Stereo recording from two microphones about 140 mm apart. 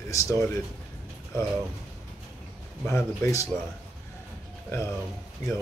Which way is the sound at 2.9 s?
20° left (ahead or behind).